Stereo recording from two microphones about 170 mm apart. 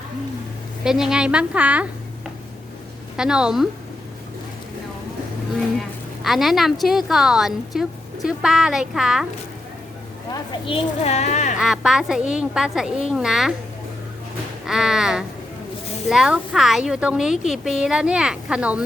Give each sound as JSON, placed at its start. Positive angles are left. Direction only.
{"t": 0.9, "sound": "a woman's voice", "side_deg": -5}
{"t": 3.2, "sound": "a woman's voice", "side_deg": -5}
{"t": 6.2, "sound": "a woman's voice", "side_deg": 0}
{"t": 10.3, "sound": "speech", "side_deg": 30}
{"t": 11.6, "sound": "a woman's voice", "side_deg": -5}
{"t": 14.7, "sound": "a woman's voice", "side_deg": -5}